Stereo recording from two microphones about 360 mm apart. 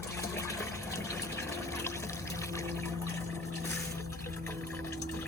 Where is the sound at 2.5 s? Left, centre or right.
Centre.